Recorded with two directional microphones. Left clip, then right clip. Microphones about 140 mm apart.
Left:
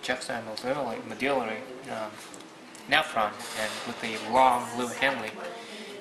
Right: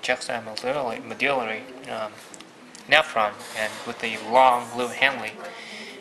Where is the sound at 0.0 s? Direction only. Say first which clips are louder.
Right 5 dB; 15° right (ahead or behind).